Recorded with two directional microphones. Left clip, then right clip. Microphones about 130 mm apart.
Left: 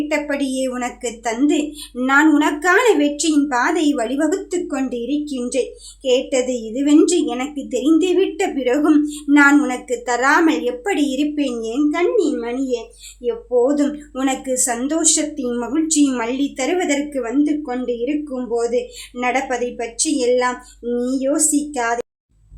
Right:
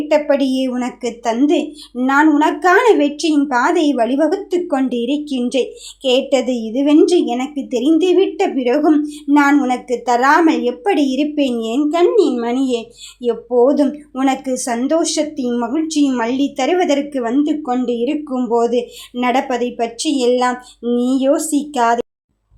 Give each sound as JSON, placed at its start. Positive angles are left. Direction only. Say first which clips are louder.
{"t": 0.1, "sound": "a woman's voice", "louder": "right 11 dB", "side_deg": -25}
{"t": 2.0, "sound": "a woman's voice", "louder": "right 3 dB", "side_deg": -5}
{"t": 2.4, "sound": "a woman's voice", "louder": "right 3 dB", "side_deg": -15}
{"t": 13.2, "sound": "a woman's voice", "louder": "right 4 dB", "side_deg": -25}
{"t": 16.2, "sound": "a woman's voice", "louder": "right 4 dB", "side_deg": -20}